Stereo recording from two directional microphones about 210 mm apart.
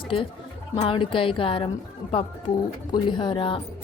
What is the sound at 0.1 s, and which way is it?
A woman's voice, 25° left (ahead or behind).